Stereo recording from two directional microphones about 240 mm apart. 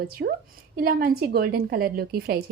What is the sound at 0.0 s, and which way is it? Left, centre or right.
A woman's voice, right.